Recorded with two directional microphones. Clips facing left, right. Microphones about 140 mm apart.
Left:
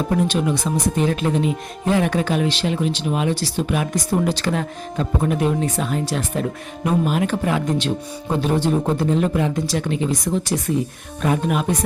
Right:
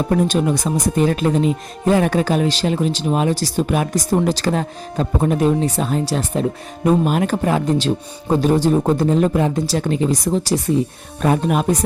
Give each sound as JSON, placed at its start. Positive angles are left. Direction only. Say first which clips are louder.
{"t": 0.1, "sound": "speech", "louder": "right 3 dB", "side_deg": -40}